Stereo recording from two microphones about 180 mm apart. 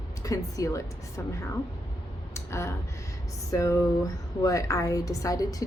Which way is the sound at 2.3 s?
15° left (ahead or behind).